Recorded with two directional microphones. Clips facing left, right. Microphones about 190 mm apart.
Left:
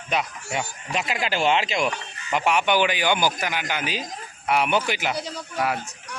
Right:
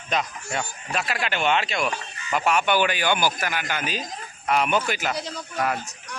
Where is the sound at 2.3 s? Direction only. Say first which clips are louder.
Left 1 dB; 15° left (ahead or behind).